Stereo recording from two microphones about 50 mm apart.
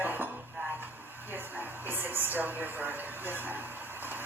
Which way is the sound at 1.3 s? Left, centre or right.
Right.